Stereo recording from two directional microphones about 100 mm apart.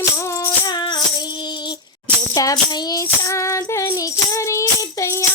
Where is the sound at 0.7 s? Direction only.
45° left (ahead or behind).